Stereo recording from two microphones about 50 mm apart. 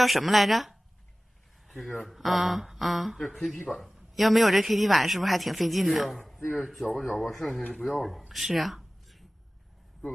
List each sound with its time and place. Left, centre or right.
0.0 s speech: centre
2.0 s speech: centre
8.3 s a sound: centre